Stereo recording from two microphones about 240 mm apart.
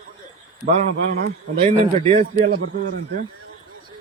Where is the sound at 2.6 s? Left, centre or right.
Right.